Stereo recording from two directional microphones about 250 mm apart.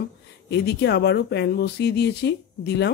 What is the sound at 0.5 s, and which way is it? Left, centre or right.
Speech, left.